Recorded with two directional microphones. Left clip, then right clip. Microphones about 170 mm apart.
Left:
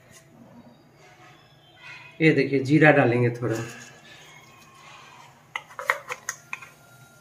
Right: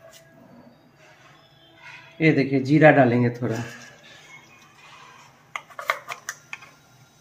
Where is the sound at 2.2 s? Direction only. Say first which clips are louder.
Even; 60° right (ahead or behind).